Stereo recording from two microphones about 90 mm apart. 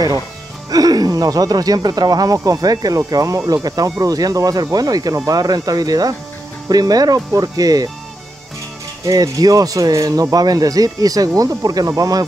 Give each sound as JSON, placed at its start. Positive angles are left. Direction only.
{"t": 0.7, "sound": "speech", "side_deg": -45}
{"t": 9.0, "sound": "speech", "side_deg": -40}